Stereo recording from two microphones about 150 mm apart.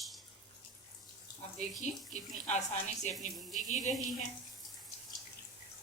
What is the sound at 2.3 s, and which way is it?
Speech, 50° left (ahead or behind).